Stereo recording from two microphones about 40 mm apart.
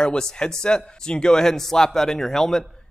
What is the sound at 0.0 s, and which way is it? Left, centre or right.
A man's voice, centre.